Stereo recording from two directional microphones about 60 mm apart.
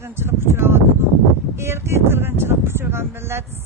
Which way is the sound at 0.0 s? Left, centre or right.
Right.